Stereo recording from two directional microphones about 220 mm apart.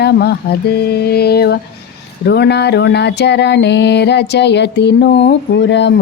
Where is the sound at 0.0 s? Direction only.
50° left (ahead or behind).